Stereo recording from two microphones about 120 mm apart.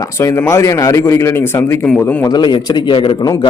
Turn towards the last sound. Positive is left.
turn(degrees=40)  # may be behind; listen again after turning